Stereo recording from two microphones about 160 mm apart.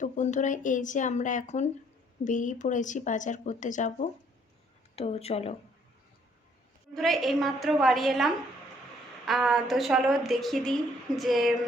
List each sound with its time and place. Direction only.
0.0 s speech: 50° left (ahead or behind)
6.9 s a woman's voice: centre (ahead or behind)